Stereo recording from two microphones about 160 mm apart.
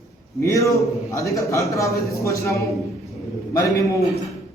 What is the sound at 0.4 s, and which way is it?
A man's voice, 20° left (ahead or behind).